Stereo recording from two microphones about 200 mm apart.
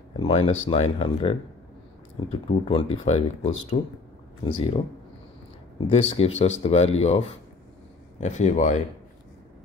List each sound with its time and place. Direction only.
0.2 s speech: 30° left (ahead or behind)
5.8 s speech: 30° left (ahead or behind)